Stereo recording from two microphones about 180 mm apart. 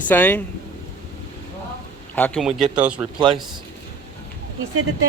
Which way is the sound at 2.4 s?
5° right (ahead or behind).